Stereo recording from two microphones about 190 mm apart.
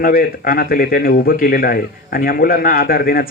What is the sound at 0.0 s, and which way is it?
Speech, 50° left (ahead or behind).